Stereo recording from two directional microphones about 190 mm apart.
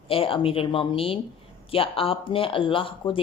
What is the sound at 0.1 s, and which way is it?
A woman's voice, 30° left (ahead or behind).